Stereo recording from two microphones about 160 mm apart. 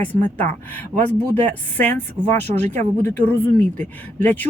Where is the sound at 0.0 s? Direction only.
10° left (ahead or behind).